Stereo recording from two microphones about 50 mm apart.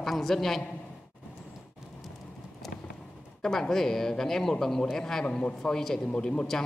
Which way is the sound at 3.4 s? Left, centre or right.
Centre.